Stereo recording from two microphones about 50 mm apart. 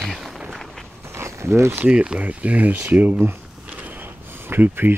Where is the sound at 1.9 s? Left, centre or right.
Right.